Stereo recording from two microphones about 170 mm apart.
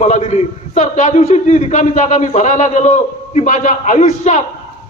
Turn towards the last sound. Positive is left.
turn(degrees=45)  # may be behind; listen again after turning